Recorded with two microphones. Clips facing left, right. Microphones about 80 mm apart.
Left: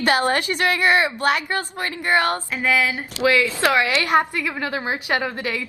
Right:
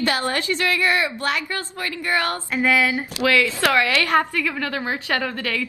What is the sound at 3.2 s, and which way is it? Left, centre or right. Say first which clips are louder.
A woman's voice: left 1 dB; centre.